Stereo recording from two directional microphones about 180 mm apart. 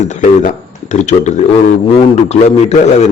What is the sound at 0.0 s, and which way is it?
Speech, 45° left (ahead or behind).